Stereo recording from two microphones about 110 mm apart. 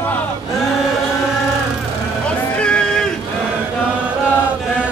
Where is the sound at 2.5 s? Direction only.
10° left (ahead or behind).